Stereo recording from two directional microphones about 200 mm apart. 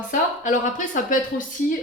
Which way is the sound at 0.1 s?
40° left (ahead or behind).